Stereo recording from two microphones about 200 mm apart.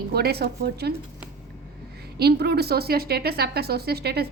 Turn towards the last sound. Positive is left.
turn(degrees=-50)  # may be behind; listen again after turning